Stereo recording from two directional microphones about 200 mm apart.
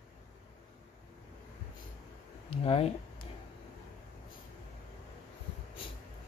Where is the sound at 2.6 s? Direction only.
30° left (ahead or behind).